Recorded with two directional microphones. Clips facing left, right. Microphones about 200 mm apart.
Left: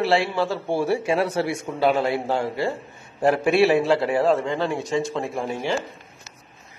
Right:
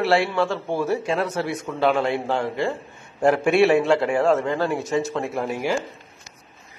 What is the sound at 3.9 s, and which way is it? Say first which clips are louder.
Speech: right 1 dB; 35° left (ahead or behind).